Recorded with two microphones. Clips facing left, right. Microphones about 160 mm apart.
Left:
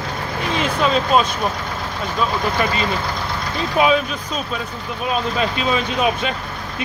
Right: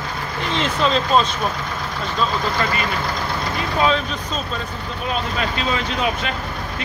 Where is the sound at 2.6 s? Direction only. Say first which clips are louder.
Left 2 dB; 20° left (ahead or behind).